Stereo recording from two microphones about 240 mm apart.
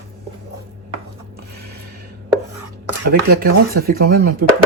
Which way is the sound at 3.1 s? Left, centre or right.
Right.